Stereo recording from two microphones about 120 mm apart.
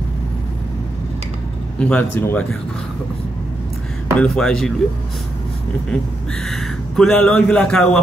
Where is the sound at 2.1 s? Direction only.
15° left (ahead or behind).